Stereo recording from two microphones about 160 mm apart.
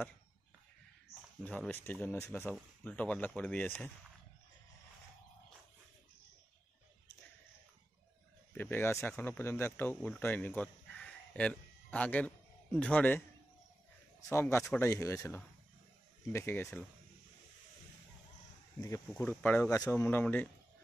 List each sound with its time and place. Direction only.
1.4 s speech: 10° left (ahead or behind)
8.5 s speech: 15° left (ahead or behind)
14.3 s speech: 15° left (ahead or behind)
18.8 s speech: 15° left (ahead or behind)